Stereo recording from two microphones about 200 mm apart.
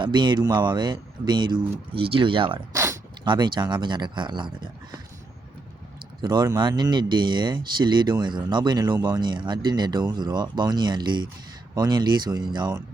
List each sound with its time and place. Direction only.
0.0 s speech: 20° right (ahead or behind)
6.2 s speech: 20° right (ahead or behind)